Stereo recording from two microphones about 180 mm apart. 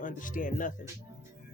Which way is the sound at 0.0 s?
50° left (ahead or behind).